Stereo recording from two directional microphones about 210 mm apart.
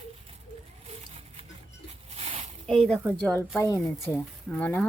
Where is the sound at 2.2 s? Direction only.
30° right (ahead or behind).